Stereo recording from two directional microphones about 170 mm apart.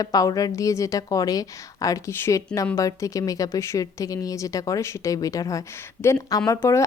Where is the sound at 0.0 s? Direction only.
20° left (ahead or behind).